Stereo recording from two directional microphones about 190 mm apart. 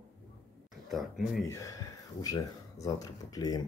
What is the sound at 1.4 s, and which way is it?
Speech, 15° left (ahead or behind).